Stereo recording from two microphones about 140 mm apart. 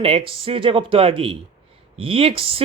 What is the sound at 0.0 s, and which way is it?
Speech, 40° right (ahead or behind).